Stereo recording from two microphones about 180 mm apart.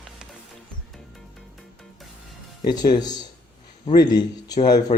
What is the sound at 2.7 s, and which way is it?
A man's voice, 20° left (ahead or behind).